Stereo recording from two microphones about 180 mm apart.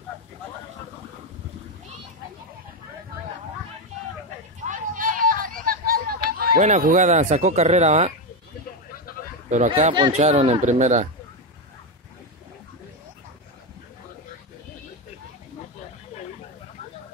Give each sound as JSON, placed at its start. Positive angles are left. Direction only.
{"t": 4.6, "sound": "a sound", "side_deg": -45}
{"t": 6.6, "sound": "speech", "side_deg": -45}
{"t": 9.7, "sound": "speech", "side_deg": -30}